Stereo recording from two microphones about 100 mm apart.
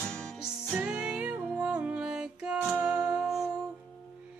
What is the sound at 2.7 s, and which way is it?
Music, 20° right (ahead or behind).